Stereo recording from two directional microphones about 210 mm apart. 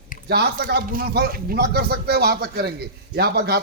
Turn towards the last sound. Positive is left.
turn(degrees=-50)  # may be behind; listen again after turning